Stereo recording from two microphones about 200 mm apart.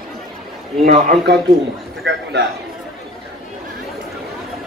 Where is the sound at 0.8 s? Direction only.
50° right (ahead or behind).